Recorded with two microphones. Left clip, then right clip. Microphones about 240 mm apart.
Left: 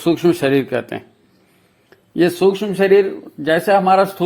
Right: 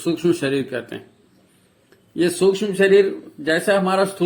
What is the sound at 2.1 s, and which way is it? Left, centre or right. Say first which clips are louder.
A man's voice: left 3 dB; left.